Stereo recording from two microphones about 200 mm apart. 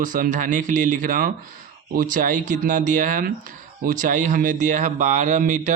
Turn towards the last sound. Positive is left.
turn(degrees=-40)  # may be behind; listen again after turning